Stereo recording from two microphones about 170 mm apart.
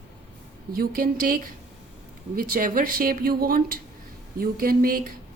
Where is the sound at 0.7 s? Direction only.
55° right (ahead or behind).